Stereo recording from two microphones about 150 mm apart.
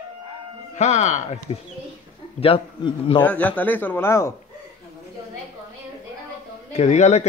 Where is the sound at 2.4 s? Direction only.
35° left (ahead or behind).